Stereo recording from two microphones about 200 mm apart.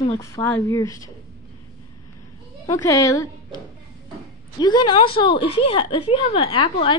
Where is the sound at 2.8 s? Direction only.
15° left (ahead or behind).